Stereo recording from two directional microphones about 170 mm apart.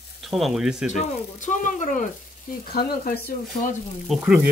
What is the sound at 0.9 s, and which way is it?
Speech, 45° left (ahead or behind).